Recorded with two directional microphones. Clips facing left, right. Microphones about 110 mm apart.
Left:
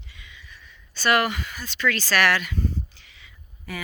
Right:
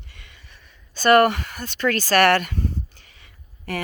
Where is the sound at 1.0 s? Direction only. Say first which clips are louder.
Right 7 dB; 50° right (ahead or behind).